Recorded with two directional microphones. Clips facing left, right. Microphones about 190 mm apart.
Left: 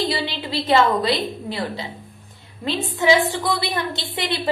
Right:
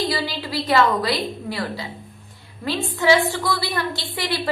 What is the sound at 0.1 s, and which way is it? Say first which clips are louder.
A woman's voice: even; 25° left (ahead or behind).